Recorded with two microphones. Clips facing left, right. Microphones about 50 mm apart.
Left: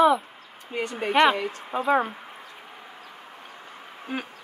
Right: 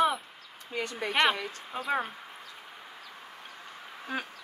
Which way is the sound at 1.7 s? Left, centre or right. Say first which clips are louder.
Left 8 dB; centre.